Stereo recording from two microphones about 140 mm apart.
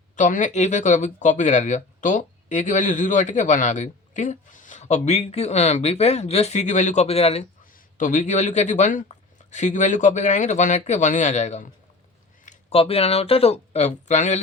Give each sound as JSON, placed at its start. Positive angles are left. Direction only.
{"t": 0.2, "sound": "speech", "side_deg": 65}
{"t": 7.6, "sound": "speech", "side_deg": 65}
{"t": 12.7, "sound": "speech", "side_deg": 45}